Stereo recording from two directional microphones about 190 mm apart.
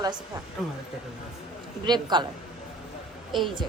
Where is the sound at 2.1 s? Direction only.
25° right (ahead or behind).